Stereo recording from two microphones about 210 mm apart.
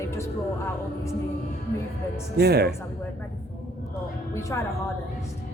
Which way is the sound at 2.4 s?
50° right (ahead or behind).